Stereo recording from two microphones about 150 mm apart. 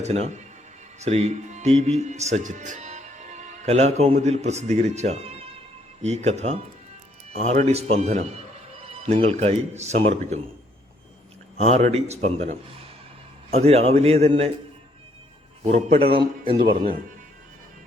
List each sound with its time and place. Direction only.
0.0 s speech: 45° right (ahead or behind)
8.8 s music: 45° right (ahead or behind)
9.1 s speech: 45° right (ahead or behind)
11.5 s speech: 45° right (ahead or behind)
15.6 s speech: 45° right (ahead or behind)